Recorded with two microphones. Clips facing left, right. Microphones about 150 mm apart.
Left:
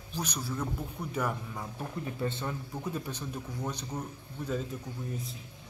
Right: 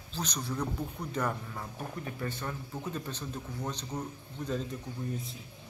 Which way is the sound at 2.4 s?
10° left (ahead or behind).